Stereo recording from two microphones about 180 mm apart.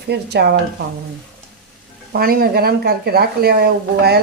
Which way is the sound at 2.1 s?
55° right (ahead or behind).